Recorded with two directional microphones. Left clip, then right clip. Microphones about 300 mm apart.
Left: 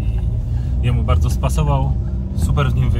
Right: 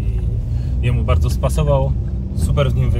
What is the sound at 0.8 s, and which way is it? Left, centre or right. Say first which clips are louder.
Speech: right 1 dB; centre.